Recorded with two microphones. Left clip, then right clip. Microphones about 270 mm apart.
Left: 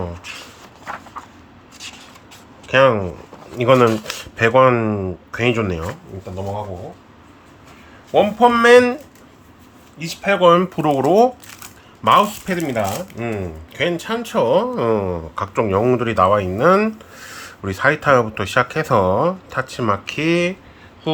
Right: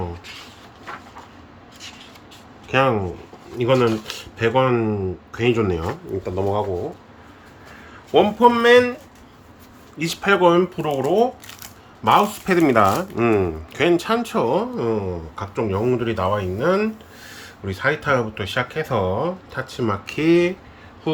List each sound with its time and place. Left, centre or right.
2.6 s speech: centre
8.1 s speech: centre
8.4 s speech: centre
10.0 s speech: centre
10.5 s speech: centre
12.5 s speech: centre